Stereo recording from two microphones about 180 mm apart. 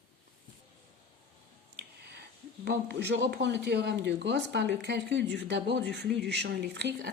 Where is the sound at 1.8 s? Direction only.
65° right (ahead or behind).